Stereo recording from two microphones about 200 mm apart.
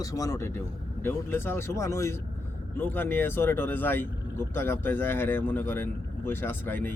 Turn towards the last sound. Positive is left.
turn(degrees=10)  # may be behind; listen again after turning